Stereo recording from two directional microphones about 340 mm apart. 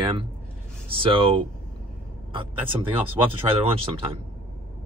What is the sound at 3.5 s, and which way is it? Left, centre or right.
Speech, centre.